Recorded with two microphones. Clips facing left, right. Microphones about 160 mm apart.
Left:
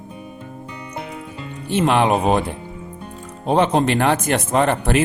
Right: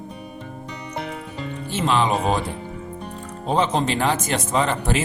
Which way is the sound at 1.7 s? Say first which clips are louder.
Left 4 dB; 60° left (ahead or behind).